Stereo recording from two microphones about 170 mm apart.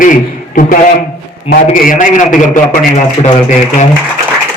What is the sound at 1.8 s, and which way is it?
A man's voice, 50° left (ahead or behind).